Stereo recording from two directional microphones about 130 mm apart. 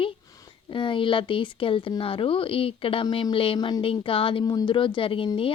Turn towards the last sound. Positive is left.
turn(degrees=40)  # may be behind; listen again after turning